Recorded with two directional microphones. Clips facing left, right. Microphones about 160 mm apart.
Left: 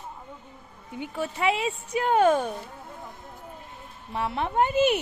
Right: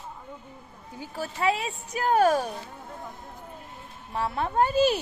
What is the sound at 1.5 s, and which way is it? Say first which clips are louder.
A woman's voice: left 2 dB; 30° left (ahead or behind).